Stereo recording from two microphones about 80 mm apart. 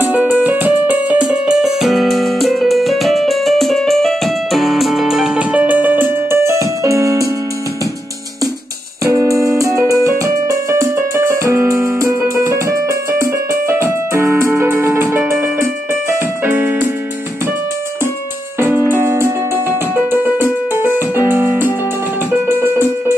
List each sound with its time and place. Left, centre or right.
0.0 s music: right
6.3 s keyboard: right
9.1 s music: right
16.4 s keyboard: right
18.6 s music: right